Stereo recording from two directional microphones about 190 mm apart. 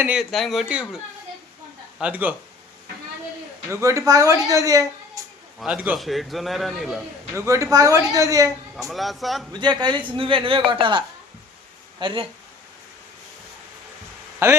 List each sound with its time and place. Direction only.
0.0 s a man's voice: 5° right (ahead or behind)
2.0 s a woman's voice: 5° right (ahead or behind)
3.7 s a woman's voice: 15° right (ahead or behind)
5.5 s a man's voice: 5° right (ahead or behind)
7.3 s a woman's voice: 15° right (ahead or behind)
8.7 s a man's voice: centre (ahead or behind)
9.5 s a woman's voice: 25° right (ahead or behind)
14.4 s a woman's voice: 15° right (ahead or behind)